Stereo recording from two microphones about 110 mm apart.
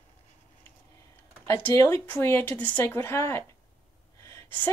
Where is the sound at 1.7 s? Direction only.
25° left (ahead or behind).